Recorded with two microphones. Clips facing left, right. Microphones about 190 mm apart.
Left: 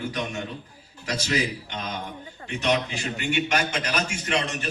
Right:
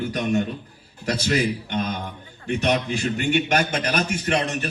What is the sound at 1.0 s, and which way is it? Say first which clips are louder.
A man's voice: right 4 dB; 55° right (ahead or behind).